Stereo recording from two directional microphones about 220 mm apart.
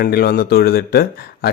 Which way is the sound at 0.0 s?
45° left (ahead or behind).